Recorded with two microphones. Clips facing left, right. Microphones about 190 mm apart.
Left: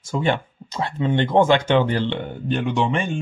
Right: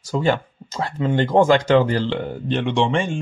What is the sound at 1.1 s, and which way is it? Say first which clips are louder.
Speech: right 1 dB; 40° right (ahead or behind).